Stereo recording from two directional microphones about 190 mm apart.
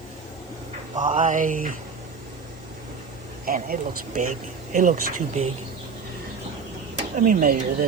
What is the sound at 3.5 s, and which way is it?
Speech, 45° right (ahead or behind).